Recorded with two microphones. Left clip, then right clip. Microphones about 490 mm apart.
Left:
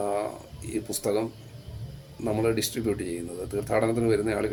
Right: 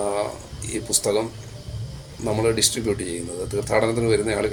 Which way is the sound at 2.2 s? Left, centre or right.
Left.